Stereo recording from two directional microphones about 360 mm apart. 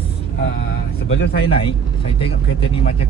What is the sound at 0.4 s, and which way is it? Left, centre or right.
Speech, left.